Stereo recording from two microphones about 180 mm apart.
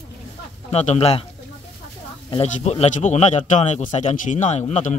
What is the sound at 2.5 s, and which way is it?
A man's voice, 40° left (ahead or behind).